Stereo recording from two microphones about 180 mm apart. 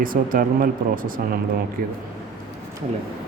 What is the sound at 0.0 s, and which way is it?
A man's voice, 50° right (ahead or behind).